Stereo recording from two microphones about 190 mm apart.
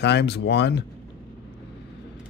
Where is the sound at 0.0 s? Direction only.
65° left (ahead or behind).